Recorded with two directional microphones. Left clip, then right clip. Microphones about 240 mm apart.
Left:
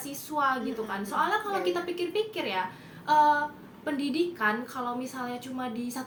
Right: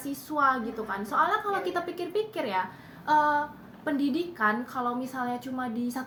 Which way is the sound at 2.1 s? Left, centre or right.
Right.